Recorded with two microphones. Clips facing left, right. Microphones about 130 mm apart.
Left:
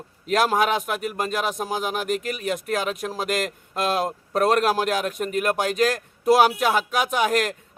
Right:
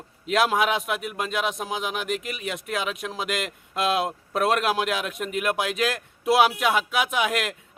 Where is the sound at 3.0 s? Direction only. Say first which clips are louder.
Left 3 dB; centre (ahead or behind).